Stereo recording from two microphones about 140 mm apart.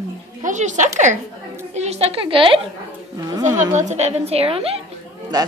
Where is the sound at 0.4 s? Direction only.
60° right (ahead or behind); by 2.6 s 40° right (ahead or behind).